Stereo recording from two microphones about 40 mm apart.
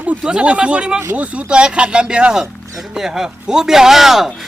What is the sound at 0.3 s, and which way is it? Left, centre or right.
Speech, right.